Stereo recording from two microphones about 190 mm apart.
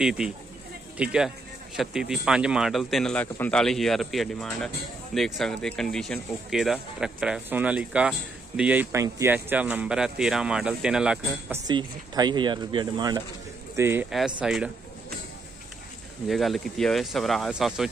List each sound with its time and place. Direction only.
0.9 s speech: 5° right (ahead or behind)
11.6 s a man's voice: 20° right (ahead or behind); by 14.7 s 5° right (ahead or behind)
16.3 s speech: centre (ahead or behind)